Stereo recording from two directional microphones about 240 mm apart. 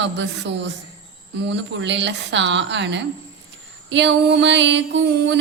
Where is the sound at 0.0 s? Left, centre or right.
Right.